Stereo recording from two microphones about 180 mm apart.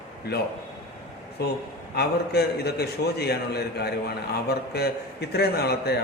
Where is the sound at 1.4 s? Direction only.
60° left (ahead or behind).